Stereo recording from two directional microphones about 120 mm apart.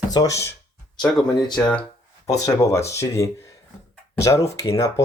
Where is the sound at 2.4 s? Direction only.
25° left (ahead or behind).